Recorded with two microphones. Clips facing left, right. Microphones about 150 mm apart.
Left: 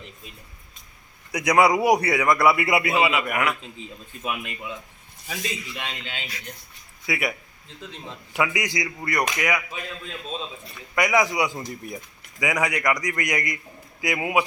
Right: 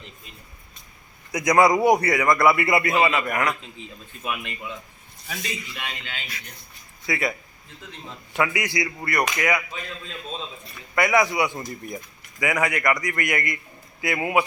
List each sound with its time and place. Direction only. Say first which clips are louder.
1.3 s a man's voice: right 1 dB; 10° left (ahead or behind)
5.3 s a man's voice: left 1 dB; 25° left (ahead or behind)
7.0 s a man's voice: right 1 dB; 10° left (ahead or behind)
10.9 s a man's voice: right 1 dB; 15° left (ahead or behind)